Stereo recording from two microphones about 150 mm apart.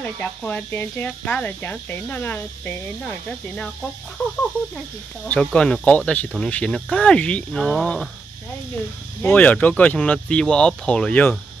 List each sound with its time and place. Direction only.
0.0 s speech: 10° left (ahead or behind)
5.2 s speech: 5° left (ahead or behind)
9.2 s speech: 10° left (ahead or behind)